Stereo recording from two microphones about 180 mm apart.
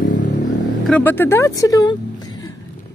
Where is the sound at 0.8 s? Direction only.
10° left (ahead or behind).